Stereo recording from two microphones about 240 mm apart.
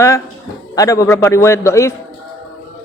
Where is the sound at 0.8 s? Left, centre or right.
Centre.